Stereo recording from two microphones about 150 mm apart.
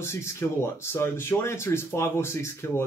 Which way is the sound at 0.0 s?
15° left (ahead or behind).